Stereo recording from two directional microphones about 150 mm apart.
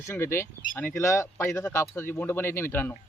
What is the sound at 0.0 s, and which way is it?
Speech, 15° left (ahead or behind).